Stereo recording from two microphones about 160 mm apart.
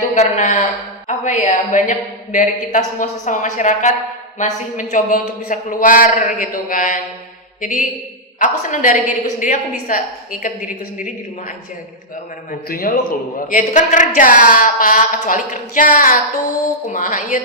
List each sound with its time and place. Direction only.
0.1 s a man's voice: 50° left (ahead or behind)
12.5 s a man's voice: 65° left (ahead or behind)